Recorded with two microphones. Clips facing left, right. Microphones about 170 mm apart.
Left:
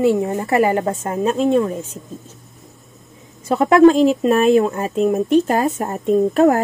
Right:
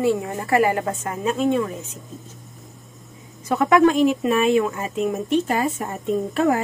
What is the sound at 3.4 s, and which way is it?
Speech, 30° left (ahead or behind).